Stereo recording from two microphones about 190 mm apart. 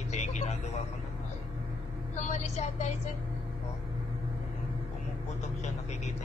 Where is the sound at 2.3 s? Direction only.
35° left (ahead or behind).